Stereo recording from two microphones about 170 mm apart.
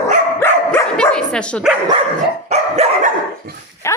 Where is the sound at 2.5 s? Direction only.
40° right (ahead or behind).